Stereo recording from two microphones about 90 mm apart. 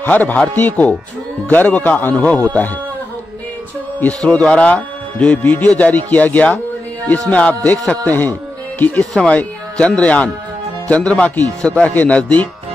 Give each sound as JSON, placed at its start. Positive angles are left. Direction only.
{"t": 0.0, "sound": "a man's voice", "side_deg": 20}
{"t": 4.0, "sound": "speech", "side_deg": 10}